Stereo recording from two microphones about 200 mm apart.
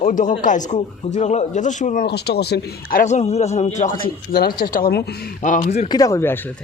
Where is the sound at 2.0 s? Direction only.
55° left (ahead or behind); by 3.7 s 35° left (ahead or behind).